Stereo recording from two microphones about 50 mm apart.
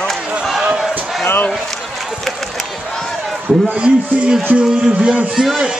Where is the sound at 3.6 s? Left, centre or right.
Right.